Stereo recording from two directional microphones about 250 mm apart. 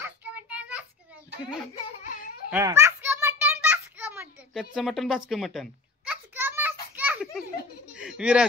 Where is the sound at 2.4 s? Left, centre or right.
Centre.